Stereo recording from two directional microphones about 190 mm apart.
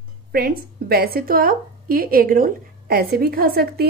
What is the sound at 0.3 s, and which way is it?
A woman's voice, 55° right (ahead or behind).